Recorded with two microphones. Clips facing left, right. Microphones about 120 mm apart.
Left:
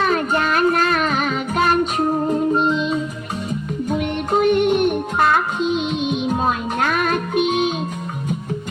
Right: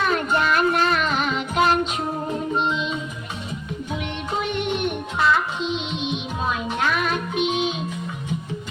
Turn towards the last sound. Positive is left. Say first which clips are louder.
# left 4 dB
turn(degrees=50)  # may be behind; listen again after turning